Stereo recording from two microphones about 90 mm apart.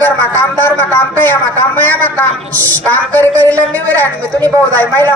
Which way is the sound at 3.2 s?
20° left (ahead or behind).